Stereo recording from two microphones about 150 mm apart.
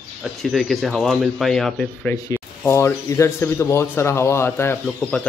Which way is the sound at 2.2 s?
20° left (ahead or behind).